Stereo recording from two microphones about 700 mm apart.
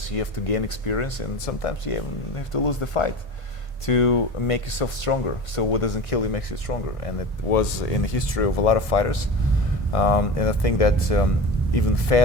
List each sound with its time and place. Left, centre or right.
0.2 s speech: left